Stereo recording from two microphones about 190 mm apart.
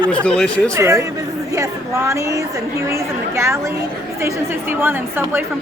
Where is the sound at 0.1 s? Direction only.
5° left (ahead or behind).